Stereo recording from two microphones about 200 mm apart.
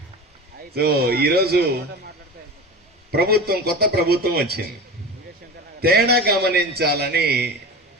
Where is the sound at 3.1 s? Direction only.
50° right (ahead or behind).